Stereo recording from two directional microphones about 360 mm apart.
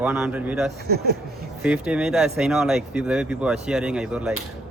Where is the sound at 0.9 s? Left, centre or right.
Right.